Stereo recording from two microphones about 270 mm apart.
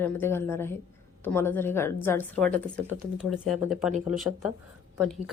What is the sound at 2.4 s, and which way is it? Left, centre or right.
Speech, right.